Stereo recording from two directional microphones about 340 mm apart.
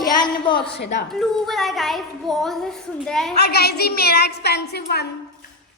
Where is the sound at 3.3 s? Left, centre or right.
Left.